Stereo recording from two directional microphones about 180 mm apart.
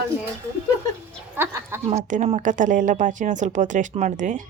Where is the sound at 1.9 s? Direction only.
45° right (ahead or behind).